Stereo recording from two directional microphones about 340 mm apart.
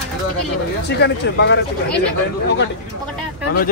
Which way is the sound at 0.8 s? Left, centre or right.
Left.